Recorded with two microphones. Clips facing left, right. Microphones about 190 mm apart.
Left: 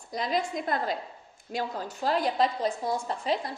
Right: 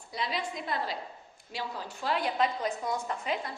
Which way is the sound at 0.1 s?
45° left (ahead or behind).